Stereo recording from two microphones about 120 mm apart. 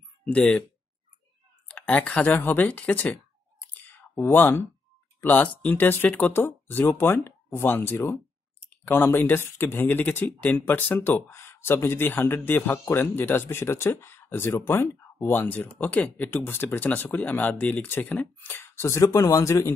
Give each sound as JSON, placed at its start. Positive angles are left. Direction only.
{"t": 0.2, "sound": "speech", "side_deg": 10}
{"t": 1.7, "sound": "speech", "side_deg": 10}